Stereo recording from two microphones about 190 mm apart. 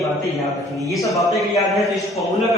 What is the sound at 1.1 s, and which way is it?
Speech, 15° left (ahead or behind).